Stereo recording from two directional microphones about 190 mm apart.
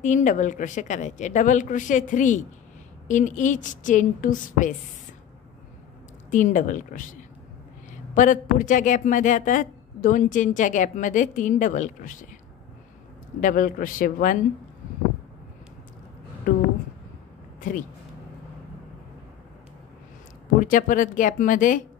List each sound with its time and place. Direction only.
0.0 s a woman's voice: 40° left (ahead or behind)
6.3 s a woman's voice: 40° left (ahead or behind)
13.4 s a woman's voice: 45° left (ahead or behind)
16.5 s a woman's voice: 45° left (ahead or behind)
20.5 s a woman's voice: 45° left (ahead or behind)